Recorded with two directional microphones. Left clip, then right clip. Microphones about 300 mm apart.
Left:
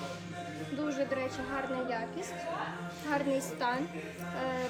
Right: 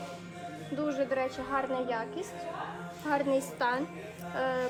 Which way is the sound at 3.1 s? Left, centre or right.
Centre.